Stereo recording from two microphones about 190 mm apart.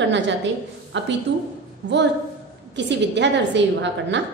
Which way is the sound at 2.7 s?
65° right (ahead or behind).